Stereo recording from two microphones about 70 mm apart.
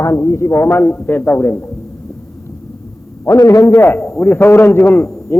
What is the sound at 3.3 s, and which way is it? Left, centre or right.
A man's voice, left.